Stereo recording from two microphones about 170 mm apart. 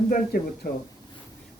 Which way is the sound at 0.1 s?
60° left (ahead or behind).